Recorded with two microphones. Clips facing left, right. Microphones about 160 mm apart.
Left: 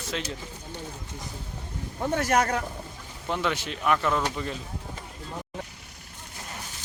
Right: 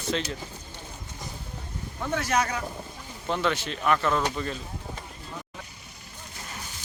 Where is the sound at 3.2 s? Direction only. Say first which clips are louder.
Right 1 dB; 10° left (ahead or behind).